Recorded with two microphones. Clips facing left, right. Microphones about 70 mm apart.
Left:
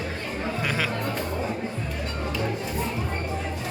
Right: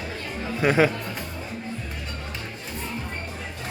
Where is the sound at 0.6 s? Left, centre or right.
Right.